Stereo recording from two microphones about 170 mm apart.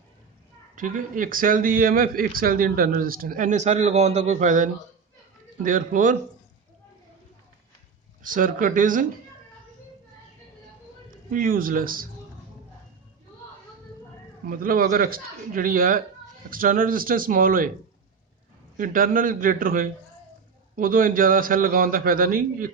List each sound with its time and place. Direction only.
0.8 s a man's voice: 50° right (ahead or behind)
8.2 s a man's voice: 50° right (ahead or behind)
11.3 s a man's voice: 55° right (ahead or behind)
14.4 s a man's voice: 55° right (ahead or behind)
18.8 s a man's voice: 55° right (ahead or behind)